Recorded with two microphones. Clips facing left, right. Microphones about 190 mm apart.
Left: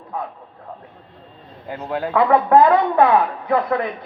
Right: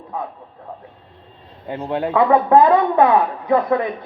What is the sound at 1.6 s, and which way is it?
Speech, 25° right (ahead or behind).